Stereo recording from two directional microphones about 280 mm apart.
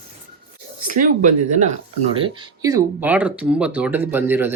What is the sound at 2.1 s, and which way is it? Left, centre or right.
Speech, centre.